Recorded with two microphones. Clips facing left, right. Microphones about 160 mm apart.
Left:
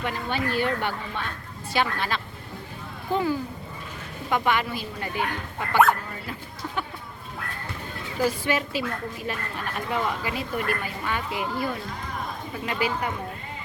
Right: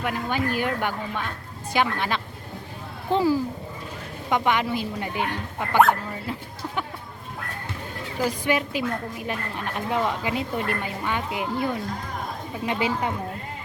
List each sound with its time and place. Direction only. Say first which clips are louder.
0.0 s speech: right 2 dB; 10° right (ahead or behind)
3.1 s a woman's voice: right 4 dB; 30° right (ahead or behind)
4.3 s a woman's voice: right 2 dB; 15° right (ahead or behind)
8.2 s a woman's voice: right 1 dB; 15° right (ahead or behind)